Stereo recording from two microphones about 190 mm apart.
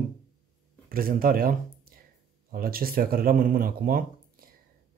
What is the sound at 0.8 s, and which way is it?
Speech, 50° right (ahead or behind).